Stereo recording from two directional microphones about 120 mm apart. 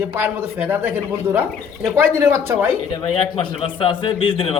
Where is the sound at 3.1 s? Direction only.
50° left (ahead or behind).